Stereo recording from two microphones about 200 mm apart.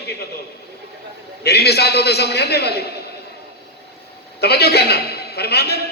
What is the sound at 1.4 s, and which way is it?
A man's voice, 55° left (ahead or behind).